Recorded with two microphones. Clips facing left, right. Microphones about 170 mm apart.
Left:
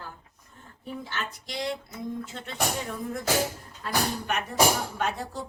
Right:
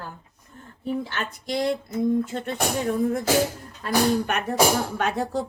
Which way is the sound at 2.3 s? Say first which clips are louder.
Right 5 dB; 50° right (ahead or behind).